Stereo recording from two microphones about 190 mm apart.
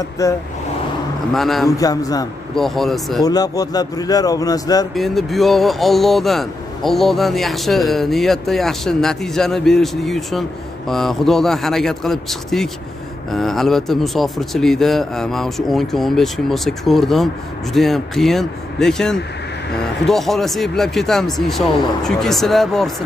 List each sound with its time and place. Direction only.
0.2 s speech: 15° left (ahead or behind)
1.3 s speech: centre (ahead or behind)
1.7 s a man's voice: 20° left (ahead or behind)
2.5 s speech: centre (ahead or behind)
3.3 s a man's voice: 20° left (ahead or behind)
4.9 s speech: centre (ahead or behind)